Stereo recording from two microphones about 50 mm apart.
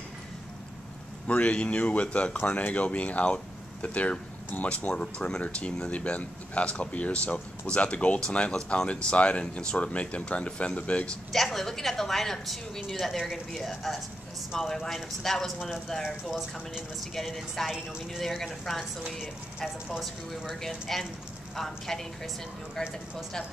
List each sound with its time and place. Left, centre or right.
1.2 s speech: left
11.3 s a woman's voice: centre
16.3 s a woman's voice: centre
20.9 s a woman's voice: centre